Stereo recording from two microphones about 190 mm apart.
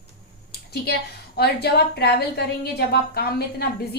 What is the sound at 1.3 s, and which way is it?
A woman's voice, 55° left (ahead or behind).